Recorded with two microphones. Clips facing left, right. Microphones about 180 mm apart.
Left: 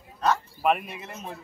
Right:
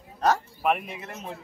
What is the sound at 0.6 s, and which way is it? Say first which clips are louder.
Speech: left 1 dB; centre (ahead or behind).